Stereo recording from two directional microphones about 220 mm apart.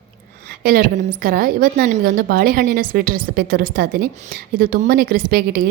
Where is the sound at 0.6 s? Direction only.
40° right (ahead or behind).